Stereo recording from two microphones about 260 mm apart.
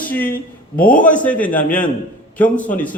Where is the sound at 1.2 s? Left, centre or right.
Centre.